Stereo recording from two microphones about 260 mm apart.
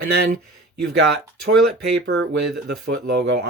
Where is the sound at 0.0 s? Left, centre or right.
Right.